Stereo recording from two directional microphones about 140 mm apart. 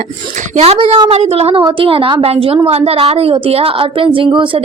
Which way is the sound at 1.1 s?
50° right (ahead or behind).